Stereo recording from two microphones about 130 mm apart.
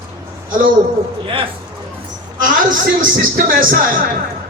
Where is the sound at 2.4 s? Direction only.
90° right.